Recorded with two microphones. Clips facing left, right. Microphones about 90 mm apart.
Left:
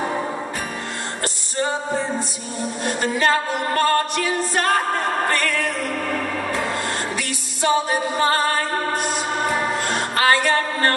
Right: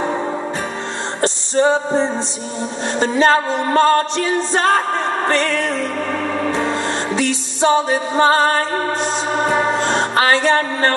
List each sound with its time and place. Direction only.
1.2 s music: 25° right (ahead or behind)